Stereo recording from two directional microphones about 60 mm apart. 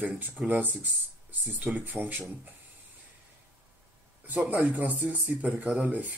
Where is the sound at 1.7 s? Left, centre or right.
Right.